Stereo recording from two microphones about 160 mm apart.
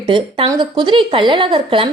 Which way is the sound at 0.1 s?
30° right (ahead or behind).